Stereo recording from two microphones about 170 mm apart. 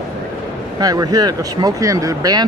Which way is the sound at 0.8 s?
20° right (ahead or behind).